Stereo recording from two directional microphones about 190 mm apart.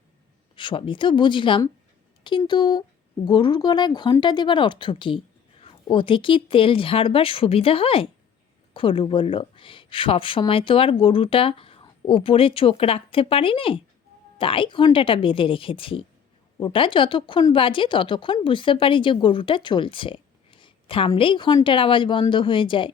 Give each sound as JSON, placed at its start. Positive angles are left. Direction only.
{"t": 0.5, "sound": "a woman's voice", "side_deg": 25}